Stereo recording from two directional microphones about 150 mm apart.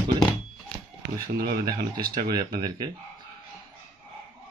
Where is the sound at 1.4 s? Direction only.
85° right.